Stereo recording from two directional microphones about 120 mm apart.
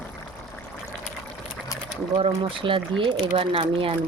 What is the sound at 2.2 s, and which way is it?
Speech, 45° right (ahead or behind).